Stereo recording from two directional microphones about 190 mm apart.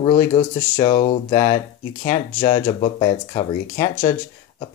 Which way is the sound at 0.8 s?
40° left (ahead or behind).